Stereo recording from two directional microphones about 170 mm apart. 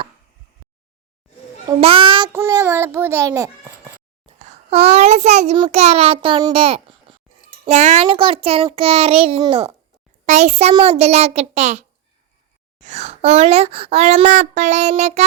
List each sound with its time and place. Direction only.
1.8 s a child's voice: 30° right (ahead or behind)
2.3 s a child's voice: 20° right (ahead or behind)
4.4 s a child's voice: 40° right (ahead or behind)
8.0 s speech: 30° right (ahead or behind)
10.2 s speech: 45° right (ahead or behind)